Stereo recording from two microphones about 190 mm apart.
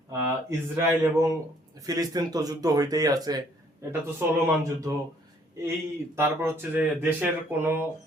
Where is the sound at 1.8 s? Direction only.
20° right (ahead or behind).